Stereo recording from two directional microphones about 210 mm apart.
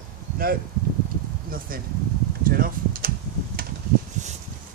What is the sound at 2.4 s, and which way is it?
Computer keyboard, 45° right (ahead or behind).